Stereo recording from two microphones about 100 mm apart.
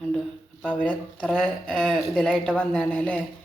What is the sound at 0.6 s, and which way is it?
Speech, 15° left (ahead or behind).